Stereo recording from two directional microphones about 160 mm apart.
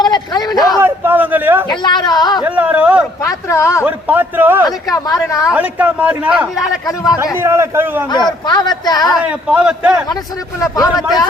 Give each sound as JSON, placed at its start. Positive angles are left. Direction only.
{"t": 0.0, "sound": "a man's voice", "side_deg": 25}
{"t": 0.8, "sound": "a man's voice", "side_deg": -15}
{"t": 1.7, "sound": "a man's voice", "side_deg": 30}
{"t": 2.4, "sound": "a man's voice", "side_deg": -10}
{"t": 3.2, "sound": "speech", "side_deg": 20}
{"t": 3.8, "sound": "a man's voice", "side_deg": -10}
{"t": 4.6, "sound": "a man's voice", "side_deg": 25}
{"t": 5.5, "sound": "a man's voice", "side_deg": -10}
{"t": 6.8, "sound": "a man's voice", "side_deg": 20}
{"t": 7.3, "sound": "a man's voice", "side_deg": -15}
{"t": 8.4, "sound": "a man's voice", "side_deg": 25}
{"t": 9.0, "sound": "a man's voice", "side_deg": -5}
{"t": 10.6, "sound": "a man's voice", "side_deg": 20}